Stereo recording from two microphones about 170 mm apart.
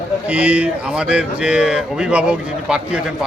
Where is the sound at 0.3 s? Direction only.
5° right (ahead or behind).